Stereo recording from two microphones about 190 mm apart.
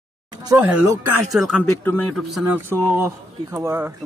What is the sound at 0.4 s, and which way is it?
Speech, 15° right (ahead or behind).